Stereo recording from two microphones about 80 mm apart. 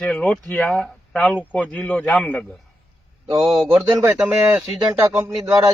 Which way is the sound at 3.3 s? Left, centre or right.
Right.